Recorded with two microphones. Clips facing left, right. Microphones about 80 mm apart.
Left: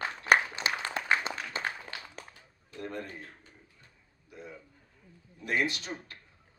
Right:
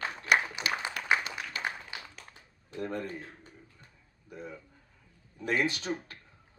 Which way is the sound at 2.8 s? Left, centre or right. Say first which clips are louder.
Right 4 dB; right.